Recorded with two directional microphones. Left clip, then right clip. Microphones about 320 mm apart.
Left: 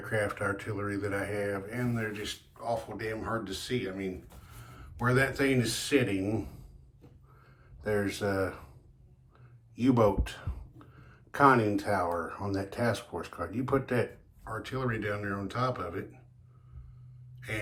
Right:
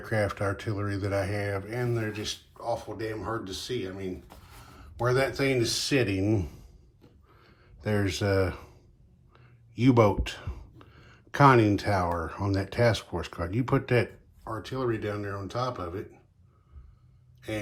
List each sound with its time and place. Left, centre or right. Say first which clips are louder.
0.0 s speech: right 2 dB; centre
7.8 s speech: right 1 dB; right
9.3 s a sound: right 7 dB; right
10.5 s music: right 3 dB; right
11.1 s speech: right 3 dB; right
14.5 s speech: right 3 dB; centre